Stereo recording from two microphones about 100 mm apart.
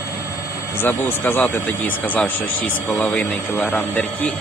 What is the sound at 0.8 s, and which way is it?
Speech, 20° left (ahead or behind).